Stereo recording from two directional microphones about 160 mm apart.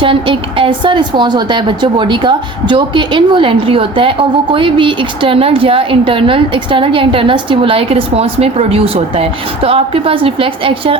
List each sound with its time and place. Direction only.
0.0 s a woman's voice: 35° right (ahead or behind)